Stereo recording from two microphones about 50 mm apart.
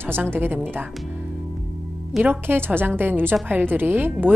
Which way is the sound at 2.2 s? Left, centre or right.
Right.